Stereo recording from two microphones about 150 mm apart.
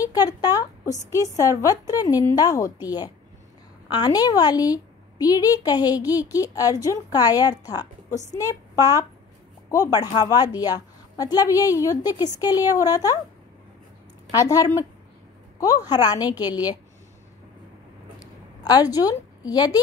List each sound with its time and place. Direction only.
0.0 s a woman's voice: 25° left (ahead or behind)
14.4 s a woman's voice: 25° left (ahead or behind)
18.6 s a woman's voice: 25° left (ahead or behind)